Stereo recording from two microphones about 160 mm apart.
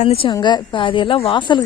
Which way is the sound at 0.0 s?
35° left (ahead or behind).